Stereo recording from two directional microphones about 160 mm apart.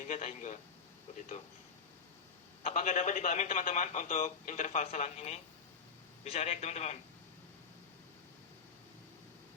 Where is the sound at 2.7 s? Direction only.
50° left (ahead or behind).